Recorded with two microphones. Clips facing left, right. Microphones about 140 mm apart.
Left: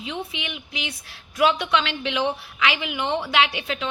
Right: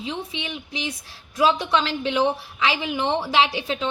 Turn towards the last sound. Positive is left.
turn(degrees=-30)  # may be behind; listen again after turning